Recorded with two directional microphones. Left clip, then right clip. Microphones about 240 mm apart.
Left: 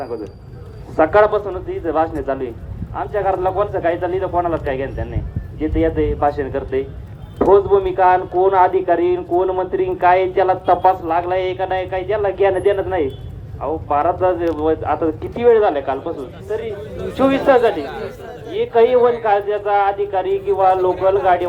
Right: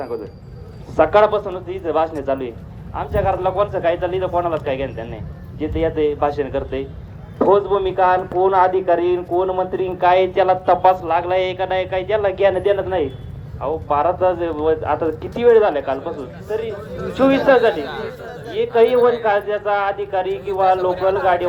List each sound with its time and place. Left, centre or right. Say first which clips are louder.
0.9 s speech: left 1 dB; right